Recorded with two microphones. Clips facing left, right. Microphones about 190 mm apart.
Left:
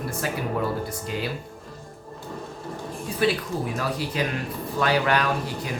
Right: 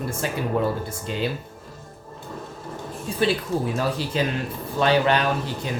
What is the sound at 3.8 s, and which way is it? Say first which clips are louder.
Speech: right 3 dB; 30° right (ahead or behind).